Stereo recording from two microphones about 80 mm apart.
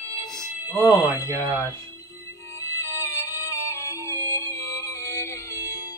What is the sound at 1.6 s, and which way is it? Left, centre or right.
Music, left.